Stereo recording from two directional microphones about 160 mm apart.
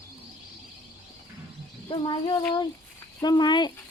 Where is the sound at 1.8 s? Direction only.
30° left (ahead or behind).